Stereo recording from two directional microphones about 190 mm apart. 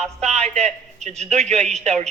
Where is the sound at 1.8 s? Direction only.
35° right (ahead or behind).